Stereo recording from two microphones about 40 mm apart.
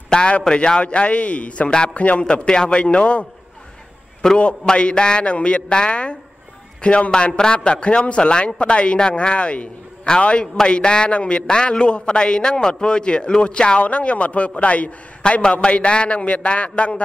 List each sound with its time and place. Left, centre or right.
0.1 s a man's voice: left
2.4 s speech: left
4.2 s a man's voice: centre
4.6 s speech: left
13.7 s a man's voice: left